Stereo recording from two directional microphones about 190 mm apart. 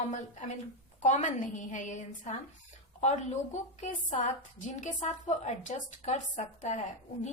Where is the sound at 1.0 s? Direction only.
40° left (ahead or behind).